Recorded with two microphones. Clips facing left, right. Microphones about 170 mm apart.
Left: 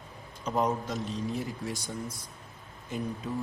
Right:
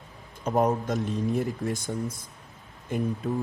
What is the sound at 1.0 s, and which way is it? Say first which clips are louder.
Speech: right 6 dB; 60° right (ahead or behind).